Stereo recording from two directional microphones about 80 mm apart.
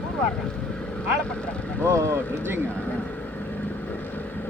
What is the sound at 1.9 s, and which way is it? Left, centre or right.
Speech, right.